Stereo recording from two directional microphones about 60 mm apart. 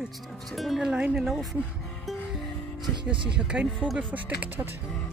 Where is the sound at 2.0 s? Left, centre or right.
Centre.